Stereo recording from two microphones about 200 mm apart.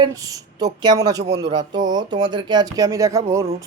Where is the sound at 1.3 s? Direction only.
60° right (ahead or behind).